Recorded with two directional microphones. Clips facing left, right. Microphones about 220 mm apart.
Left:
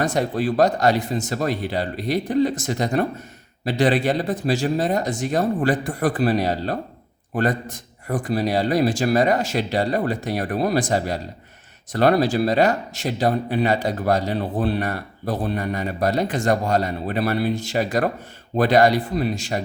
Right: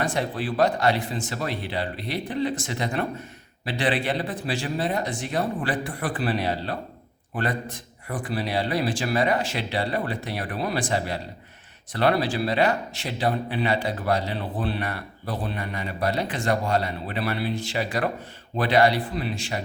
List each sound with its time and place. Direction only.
0.0 s speech: 40° left (ahead or behind)